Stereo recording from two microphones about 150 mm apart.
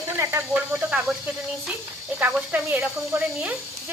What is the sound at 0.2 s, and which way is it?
Speech, 20° right (ahead or behind).